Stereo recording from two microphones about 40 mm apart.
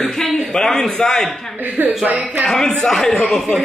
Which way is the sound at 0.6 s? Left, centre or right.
Centre.